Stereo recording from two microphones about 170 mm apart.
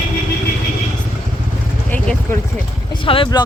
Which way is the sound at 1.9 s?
10° left (ahead or behind).